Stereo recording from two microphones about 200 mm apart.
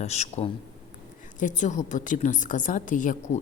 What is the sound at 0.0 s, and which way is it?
A woman's voice, 35° left (ahead or behind).